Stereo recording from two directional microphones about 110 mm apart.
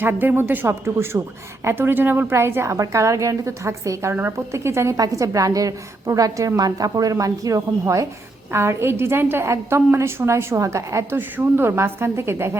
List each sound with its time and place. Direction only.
0.0 s a woman's voice: 20° right (ahead or behind)